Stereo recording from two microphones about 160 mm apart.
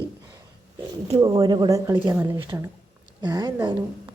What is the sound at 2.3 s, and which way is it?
Speech, 30° right (ahead or behind).